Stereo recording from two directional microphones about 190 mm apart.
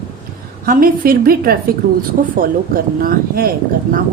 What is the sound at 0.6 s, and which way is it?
Speech, 50° right (ahead or behind).